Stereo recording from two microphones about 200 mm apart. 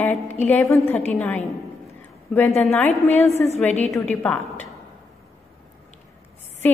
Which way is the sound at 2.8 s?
35° left (ahead or behind).